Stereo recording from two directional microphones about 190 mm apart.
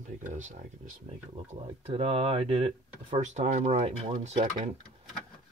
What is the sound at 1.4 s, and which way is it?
Speech, 30° right (ahead or behind).